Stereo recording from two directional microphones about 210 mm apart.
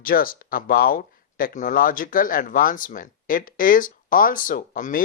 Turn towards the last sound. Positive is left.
turn(degrees=40)  # may be behind; listen again after turning